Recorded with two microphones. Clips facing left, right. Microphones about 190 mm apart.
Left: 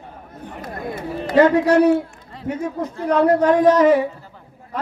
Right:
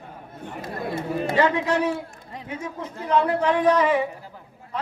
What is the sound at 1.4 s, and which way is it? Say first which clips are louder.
A man's voice: left 9 dB; 45° left (ahead or behind).